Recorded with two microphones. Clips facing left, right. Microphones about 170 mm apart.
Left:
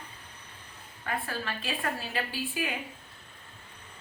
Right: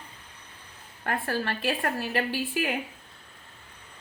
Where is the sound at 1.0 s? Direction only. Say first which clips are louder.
Right 5 dB; 55° right (ahead or behind).